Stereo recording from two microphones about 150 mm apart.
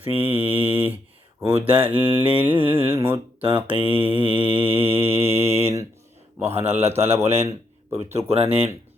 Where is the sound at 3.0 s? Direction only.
35° right (ahead or behind).